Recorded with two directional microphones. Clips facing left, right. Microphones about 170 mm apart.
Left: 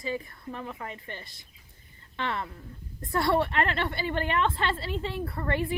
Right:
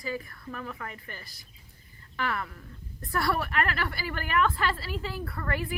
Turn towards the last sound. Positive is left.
turn(degrees=25)  # may be behind; listen again after turning